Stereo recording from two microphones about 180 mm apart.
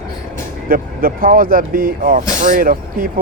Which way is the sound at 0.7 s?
55° right (ahead or behind).